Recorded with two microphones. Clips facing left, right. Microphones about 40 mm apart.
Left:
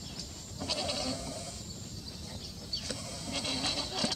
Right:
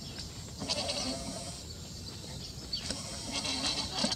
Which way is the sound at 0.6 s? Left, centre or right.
Centre.